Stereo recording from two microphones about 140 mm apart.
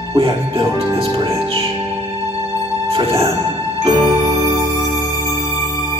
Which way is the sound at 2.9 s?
35° right (ahead or behind).